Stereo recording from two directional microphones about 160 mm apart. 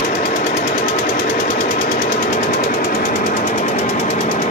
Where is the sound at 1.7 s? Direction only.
55° left (ahead or behind).